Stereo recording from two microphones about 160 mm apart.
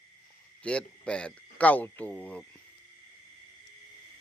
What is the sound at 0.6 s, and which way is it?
Speech, 5° left (ahead or behind).